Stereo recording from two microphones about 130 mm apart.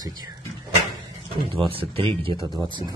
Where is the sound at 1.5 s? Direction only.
45° right (ahead or behind).